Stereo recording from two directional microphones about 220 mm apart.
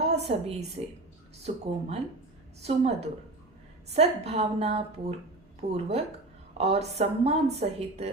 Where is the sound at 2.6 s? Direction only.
30° right (ahead or behind).